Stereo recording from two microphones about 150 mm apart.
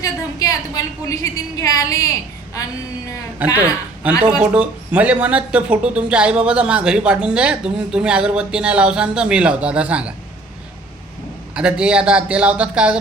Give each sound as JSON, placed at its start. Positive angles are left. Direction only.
{"t": 0.0, "sound": "a woman's voice", "side_deg": 25}
{"t": 3.4, "sound": "speech", "side_deg": -10}
{"t": 11.5, "sound": "speech", "side_deg": -5}